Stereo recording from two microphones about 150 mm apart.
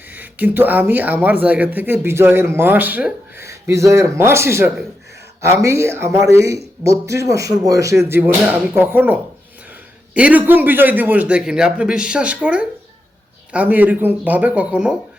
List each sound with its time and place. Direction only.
0.1 s speech: 10° right (ahead or behind)